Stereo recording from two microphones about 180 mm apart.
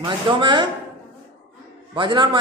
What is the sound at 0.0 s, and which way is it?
Speech, 25° right (ahead or behind).